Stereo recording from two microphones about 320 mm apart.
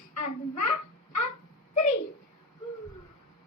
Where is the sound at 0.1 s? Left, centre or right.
Left.